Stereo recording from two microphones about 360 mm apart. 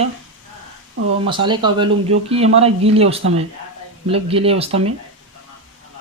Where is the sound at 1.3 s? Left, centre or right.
Centre.